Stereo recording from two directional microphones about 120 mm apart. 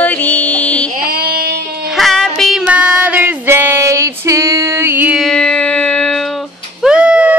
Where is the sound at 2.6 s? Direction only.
10° right (ahead or behind).